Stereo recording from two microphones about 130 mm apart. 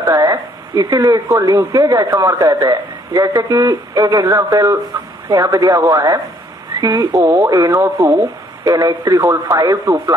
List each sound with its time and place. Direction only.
0.0 s speech: 25° right (ahead or behind)